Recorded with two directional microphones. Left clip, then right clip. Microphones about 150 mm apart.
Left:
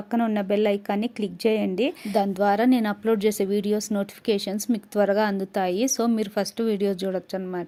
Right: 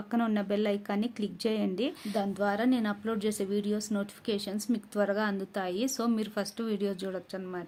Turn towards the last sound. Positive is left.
turn(degrees=40)  # may be behind; listen again after turning